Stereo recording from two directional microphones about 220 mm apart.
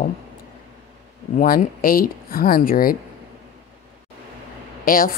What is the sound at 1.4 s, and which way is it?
Speech, 40° left (ahead or behind).